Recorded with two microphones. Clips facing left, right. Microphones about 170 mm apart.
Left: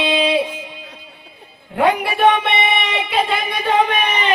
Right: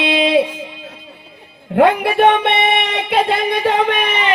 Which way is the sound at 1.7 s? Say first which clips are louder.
Right 5 dB; 60° right (ahead or behind).